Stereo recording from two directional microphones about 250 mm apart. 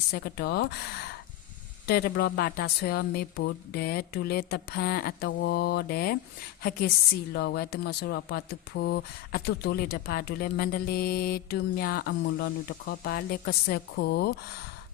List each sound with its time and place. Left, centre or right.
0.1 s speech: left
1.9 s speech: left